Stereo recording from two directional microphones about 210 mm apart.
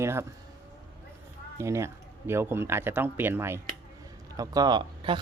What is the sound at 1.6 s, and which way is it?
Speech, 15° right (ahead or behind).